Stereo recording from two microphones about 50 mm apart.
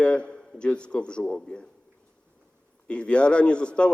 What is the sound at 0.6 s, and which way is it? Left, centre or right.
Speech, left.